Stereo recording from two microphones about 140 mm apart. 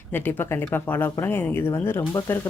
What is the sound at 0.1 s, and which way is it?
Speech, 15° left (ahead or behind).